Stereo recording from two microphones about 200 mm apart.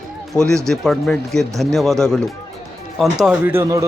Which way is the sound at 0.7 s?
Centre (ahead or behind).